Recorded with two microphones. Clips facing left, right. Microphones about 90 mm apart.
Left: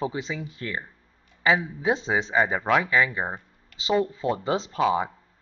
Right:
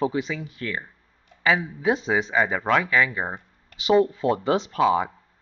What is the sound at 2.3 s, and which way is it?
Speech, 15° left (ahead or behind).